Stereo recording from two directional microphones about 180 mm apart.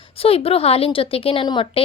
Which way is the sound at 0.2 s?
30° left (ahead or behind).